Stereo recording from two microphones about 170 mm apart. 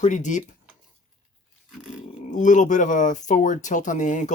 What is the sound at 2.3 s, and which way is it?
Speech, 50° left (ahead or behind).